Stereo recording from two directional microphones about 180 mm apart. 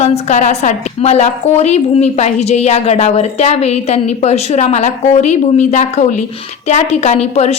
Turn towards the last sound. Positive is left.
turn(degrees=35)  # may be behind; listen again after turning